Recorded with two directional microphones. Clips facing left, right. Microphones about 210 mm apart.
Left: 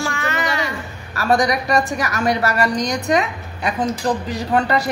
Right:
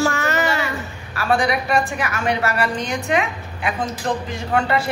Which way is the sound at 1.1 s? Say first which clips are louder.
Left 2 dB; 40° left (ahead or behind).